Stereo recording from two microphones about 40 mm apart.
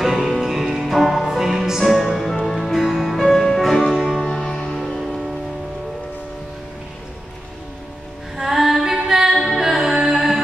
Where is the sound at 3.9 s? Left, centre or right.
Centre.